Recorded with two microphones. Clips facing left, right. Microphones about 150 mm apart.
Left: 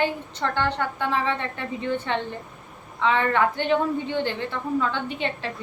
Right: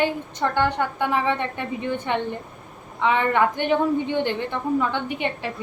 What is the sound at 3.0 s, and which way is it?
A woman's voice, 15° right (ahead or behind).